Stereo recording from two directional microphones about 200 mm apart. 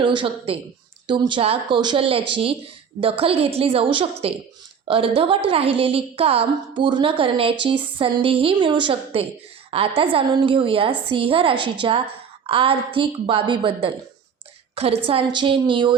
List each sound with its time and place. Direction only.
0.0 s a woman's voice: 25° right (ahead or behind)